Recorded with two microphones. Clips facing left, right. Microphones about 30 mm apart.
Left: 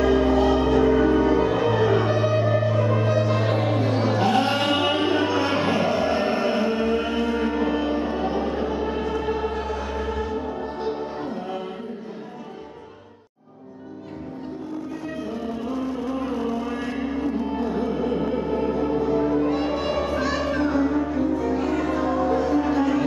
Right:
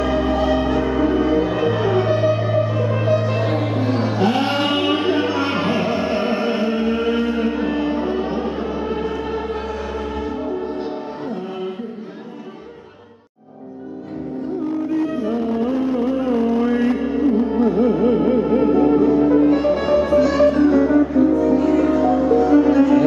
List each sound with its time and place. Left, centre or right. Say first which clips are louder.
0.0 s music: even; centre
15.6 s music: right 7 dB; right
16.9 s music: right 8 dB; centre